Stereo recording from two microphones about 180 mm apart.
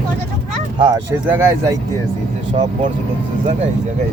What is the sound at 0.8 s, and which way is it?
Speech, 25° right (ahead or behind).